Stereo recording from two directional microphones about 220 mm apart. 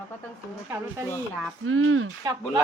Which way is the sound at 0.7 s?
10° right (ahead or behind).